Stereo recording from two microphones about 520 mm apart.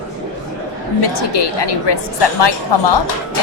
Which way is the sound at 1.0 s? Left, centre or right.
Left.